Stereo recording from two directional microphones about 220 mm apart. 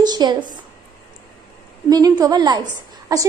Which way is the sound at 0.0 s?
20° right (ahead or behind).